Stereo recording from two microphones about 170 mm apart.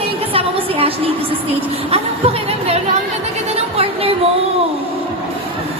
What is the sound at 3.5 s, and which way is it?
Music, 35° right (ahead or behind).